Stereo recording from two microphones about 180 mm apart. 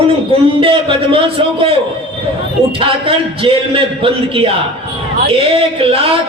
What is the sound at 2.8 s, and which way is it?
A man's voice, 30° right (ahead or behind).